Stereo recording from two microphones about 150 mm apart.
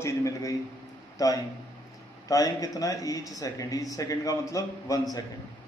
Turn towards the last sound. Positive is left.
turn(degrees=20)  # may be behind; listen again after turning